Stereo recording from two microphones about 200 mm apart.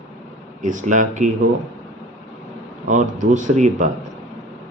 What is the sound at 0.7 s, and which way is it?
Speech, 40° right (ahead or behind).